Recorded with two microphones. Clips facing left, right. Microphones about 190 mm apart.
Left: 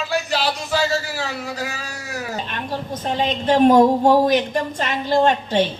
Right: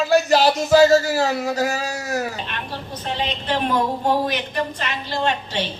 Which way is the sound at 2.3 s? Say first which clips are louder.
Left 4 dB; 40° left (ahead or behind).